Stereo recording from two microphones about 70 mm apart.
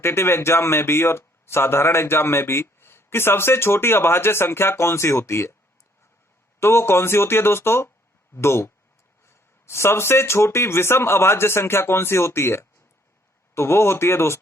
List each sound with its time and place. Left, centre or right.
0.0 s speech: left
6.6 s speech: left